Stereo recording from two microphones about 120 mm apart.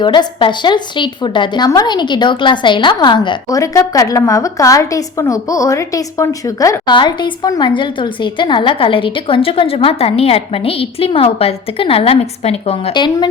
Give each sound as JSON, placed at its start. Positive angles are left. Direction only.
{"t": 0.0, "sound": "a woman's voice", "side_deg": 40}
{"t": 3.5, "sound": "a woman's voice", "side_deg": 25}
{"t": 12.9, "sound": "a woman's voice", "side_deg": 40}